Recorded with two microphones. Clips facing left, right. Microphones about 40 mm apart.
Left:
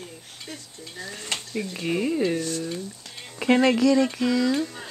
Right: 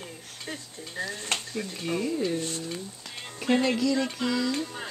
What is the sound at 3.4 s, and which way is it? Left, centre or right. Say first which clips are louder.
Speech: left 5 dB; left.